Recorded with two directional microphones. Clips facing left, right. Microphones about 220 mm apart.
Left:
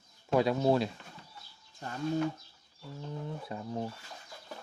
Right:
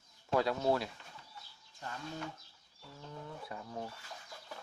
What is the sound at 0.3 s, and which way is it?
Speech, 15° left (ahead or behind).